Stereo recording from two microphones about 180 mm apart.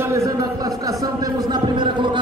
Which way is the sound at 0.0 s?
15° right (ahead or behind).